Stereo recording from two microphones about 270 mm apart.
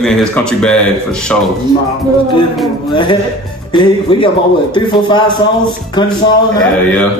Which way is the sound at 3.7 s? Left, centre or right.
Centre.